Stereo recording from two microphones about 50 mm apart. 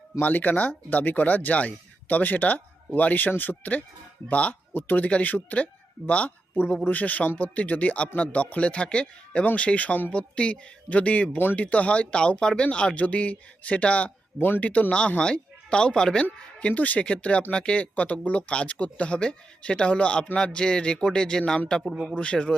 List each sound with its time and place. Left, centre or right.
0.2 s speech: left
4.7 s speech: left; by 16.2 s centre
16.2 s speech: left